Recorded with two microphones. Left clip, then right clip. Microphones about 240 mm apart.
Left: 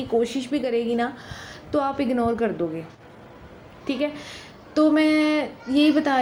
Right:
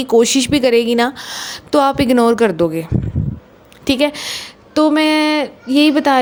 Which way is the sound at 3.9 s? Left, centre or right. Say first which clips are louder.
Right 11 dB; right.